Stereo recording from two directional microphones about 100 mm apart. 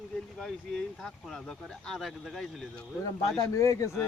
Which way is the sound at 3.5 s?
30° left (ahead or behind).